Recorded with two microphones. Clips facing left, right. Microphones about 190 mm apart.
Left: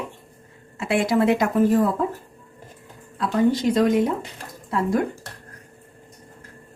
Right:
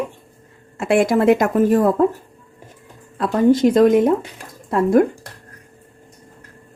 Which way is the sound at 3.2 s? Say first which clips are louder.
Right 6 dB; 55° right (ahead or behind).